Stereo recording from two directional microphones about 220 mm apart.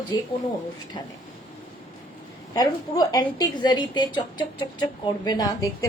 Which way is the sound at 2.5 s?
15° left (ahead or behind).